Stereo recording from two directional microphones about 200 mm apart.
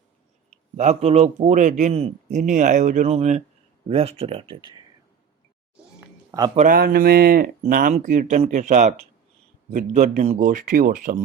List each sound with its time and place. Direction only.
0.8 s speech: 35° right (ahead or behind)
6.6 s speech: 45° right (ahead or behind)